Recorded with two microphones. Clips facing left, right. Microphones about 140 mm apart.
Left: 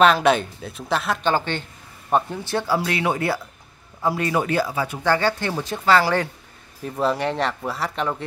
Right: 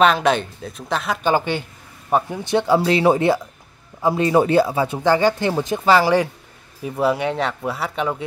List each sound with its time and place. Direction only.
0.0 s speech: centre (ahead or behind)
1.3 s a woman's voice: 10° right (ahead or behind)